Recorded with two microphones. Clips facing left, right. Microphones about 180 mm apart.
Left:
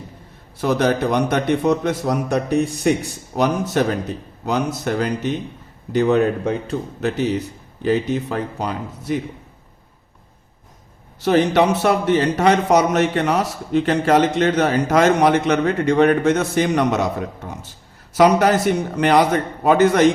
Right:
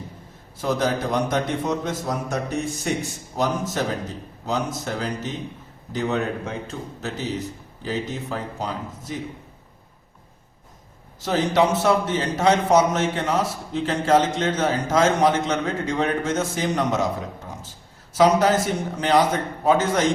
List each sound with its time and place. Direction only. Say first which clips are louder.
0.6 s a man's voice: left 5 dB; 65° left (ahead or behind)
11.2 s speech: left 5 dB; 65° left (ahead or behind)